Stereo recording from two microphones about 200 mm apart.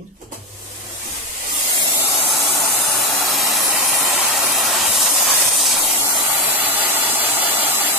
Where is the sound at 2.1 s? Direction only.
Centre (ahead or behind).